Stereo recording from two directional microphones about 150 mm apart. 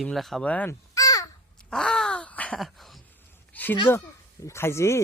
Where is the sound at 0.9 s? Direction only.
25° left (ahead or behind).